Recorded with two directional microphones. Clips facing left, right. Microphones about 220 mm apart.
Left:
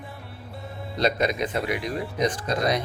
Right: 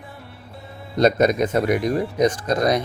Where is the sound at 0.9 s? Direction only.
45° right (ahead or behind).